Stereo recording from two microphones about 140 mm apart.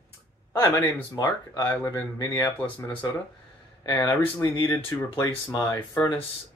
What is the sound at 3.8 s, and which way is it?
Speech, 30° left (ahead or behind).